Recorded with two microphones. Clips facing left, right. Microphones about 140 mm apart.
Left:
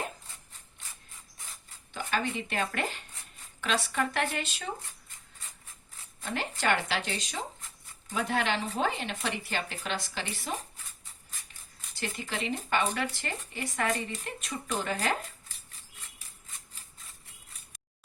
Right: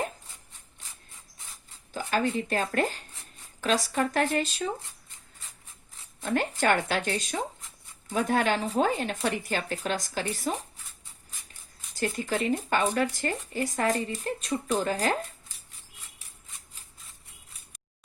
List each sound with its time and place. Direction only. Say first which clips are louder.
1.9 s speech: right 4 dB; 35° right (ahead or behind)
6.2 s speech: right 5 dB; 50° right (ahead or behind)
11.9 s speech: right 7 dB; 40° right (ahead or behind)